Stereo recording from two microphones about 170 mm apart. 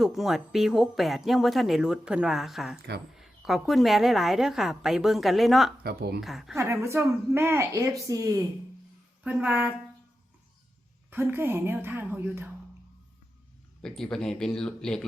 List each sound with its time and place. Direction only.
0.0 s speech: centre (ahead or behind)
5.8 s speech: 65° right (ahead or behind)
6.1 s speech: centre (ahead or behind)
6.6 s speech: 15° right (ahead or behind)
9.2 s speech: 10° right (ahead or behind)
11.1 s speech: 10° right (ahead or behind)
13.8 s speech: 5° left (ahead or behind)